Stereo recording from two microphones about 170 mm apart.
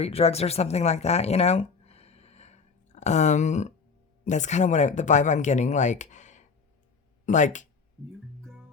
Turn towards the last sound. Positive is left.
turn(degrees=45)  # may be behind; listen again after turning